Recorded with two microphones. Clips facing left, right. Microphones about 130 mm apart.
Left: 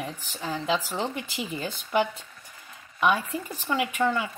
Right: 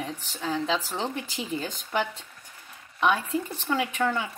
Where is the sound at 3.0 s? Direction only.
10° left (ahead or behind).